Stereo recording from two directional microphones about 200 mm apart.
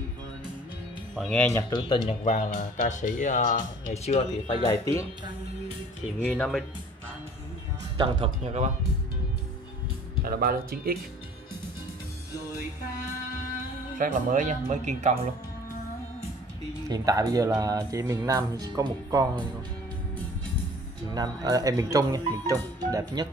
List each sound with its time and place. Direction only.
1.1 s speech: 5° left (ahead or behind)
1.7 s speech: 25° left (ahead or behind)
2.2 s speech: 40° left (ahead or behind)
4.6 s speech: 15° left (ahead or behind)
6.2 s speech: 5° left (ahead or behind)
8.0 s speech: 30° right (ahead or behind)
10.2 s speech: 45° right (ahead or behind)
13.9 s speech: 40° right (ahead or behind)
16.9 s speech: 20° right (ahead or behind)
21.1 s speech: 20° right (ahead or behind)